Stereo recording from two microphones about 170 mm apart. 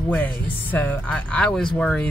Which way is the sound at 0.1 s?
10° left (ahead or behind).